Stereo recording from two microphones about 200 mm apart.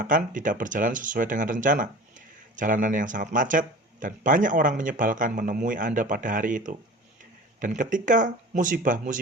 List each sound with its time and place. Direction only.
0.0 s speech: 40° right (ahead or behind)